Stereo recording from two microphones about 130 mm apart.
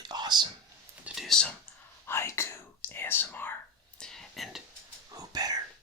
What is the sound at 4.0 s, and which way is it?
Whispering, 5° left (ahead or behind).